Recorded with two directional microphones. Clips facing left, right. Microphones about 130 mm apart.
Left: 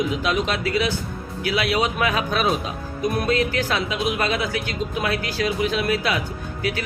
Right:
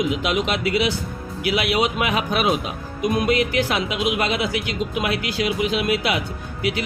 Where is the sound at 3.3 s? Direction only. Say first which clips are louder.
Right 1 dB; 35° left (ahead or behind).